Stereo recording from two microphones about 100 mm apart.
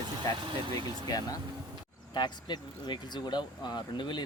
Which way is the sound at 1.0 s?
40° left (ahead or behind).